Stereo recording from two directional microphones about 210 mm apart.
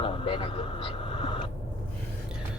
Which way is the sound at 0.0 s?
25° left (ahead or behind).